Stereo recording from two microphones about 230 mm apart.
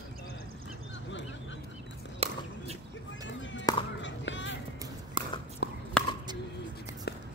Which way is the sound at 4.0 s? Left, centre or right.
Left.